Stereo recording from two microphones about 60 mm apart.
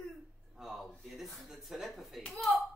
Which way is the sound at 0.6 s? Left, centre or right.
Centre.